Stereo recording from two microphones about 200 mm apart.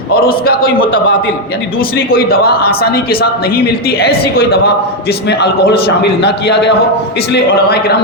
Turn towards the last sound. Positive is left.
turn(degrees=55)  # may be behind; listen again after turning